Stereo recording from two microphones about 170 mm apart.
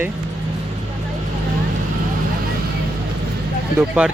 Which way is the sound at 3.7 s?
10° right (ahead or behind).